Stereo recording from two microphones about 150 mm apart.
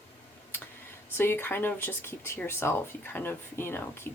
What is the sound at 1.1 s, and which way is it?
Speech, 15° left (ahead or behind).